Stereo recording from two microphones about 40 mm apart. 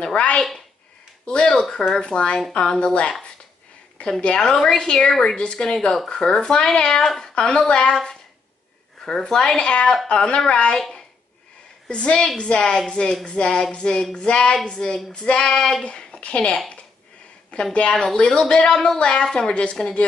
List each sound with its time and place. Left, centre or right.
0.0 s speech: left
4.0 s a woman's voice: left
4.4 s speech: centre
5.2 s speech: left
7.3 s speech: left
7.9 s speech: centre
9.6 s speech: left
10.8 s a sound: centre
11.9 s speech: left
12.6 s speech: centre
15.4 s speech: centre
15.8 s a woman's voice: left
17.8 s speech: centre